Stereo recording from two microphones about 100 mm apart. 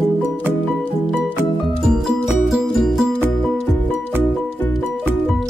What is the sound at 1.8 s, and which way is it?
Music, 5° right (ahead or behind).